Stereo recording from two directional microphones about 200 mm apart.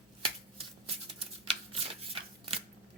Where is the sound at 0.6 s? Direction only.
30° right (ahead or behind).